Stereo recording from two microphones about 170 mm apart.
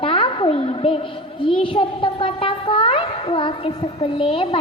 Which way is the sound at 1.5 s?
30° left (ahead or behind).